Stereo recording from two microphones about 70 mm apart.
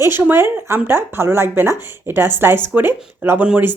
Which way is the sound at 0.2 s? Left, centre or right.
Right.